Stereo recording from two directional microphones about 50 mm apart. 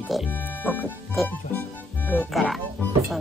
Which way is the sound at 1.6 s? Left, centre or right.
Left.